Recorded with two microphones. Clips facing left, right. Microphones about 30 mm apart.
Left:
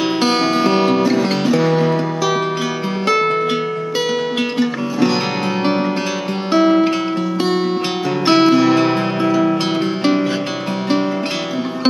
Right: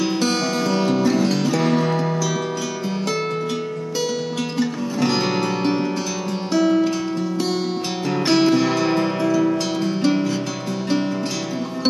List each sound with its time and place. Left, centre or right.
0.2 s music: left
1.1 s music: left
1.6 s music: centre
3.1 s music: left
6.5 s music: left
8.3 s music: left